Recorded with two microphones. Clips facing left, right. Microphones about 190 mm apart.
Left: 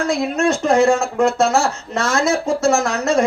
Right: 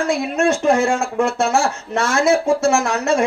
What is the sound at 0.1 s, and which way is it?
Speech, 40° left (ahead or behind).